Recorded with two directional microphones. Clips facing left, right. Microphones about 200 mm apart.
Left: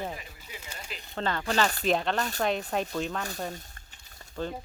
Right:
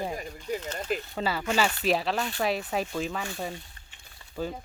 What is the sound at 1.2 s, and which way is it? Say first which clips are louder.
Speech: left 1 dB; 10° right (ahead or behind).